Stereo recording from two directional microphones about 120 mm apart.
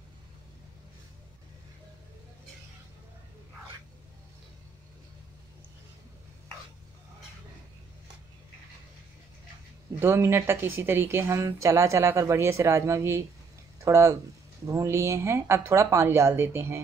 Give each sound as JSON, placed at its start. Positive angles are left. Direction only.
{"t": 9.9, "sound": "speech", "side_deg": -20}